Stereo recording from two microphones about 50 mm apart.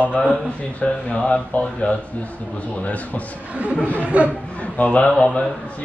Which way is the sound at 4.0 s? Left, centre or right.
Right.